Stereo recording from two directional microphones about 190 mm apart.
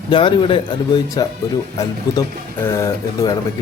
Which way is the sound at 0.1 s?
25° left (ahead or behind).